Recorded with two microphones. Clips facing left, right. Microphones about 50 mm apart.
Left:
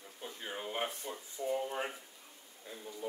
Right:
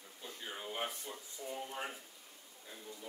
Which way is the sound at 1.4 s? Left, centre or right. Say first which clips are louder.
Left 8 dB; left.